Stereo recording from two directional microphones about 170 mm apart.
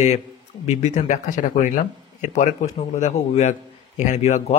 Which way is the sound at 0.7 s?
45° left (ahead or behind).